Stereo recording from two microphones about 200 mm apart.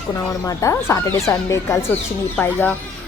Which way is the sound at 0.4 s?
15° left (ahead or behind).